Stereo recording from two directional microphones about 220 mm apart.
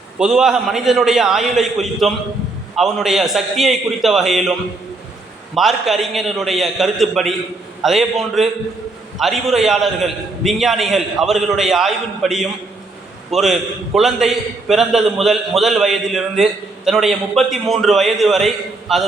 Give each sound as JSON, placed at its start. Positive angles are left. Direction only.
{"t": 0.2, "sound": "a man's voice", "side_deg": -5}
{"t": 5.5, "sound": "a man's voice", "side_deg": 0}